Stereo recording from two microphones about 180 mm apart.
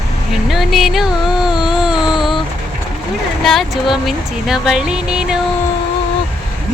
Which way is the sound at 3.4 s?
Centre (ahead or behind).